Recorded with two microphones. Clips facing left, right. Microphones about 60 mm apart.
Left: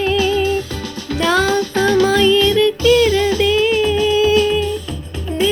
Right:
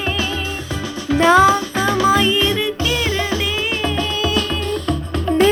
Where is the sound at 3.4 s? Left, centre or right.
Centre.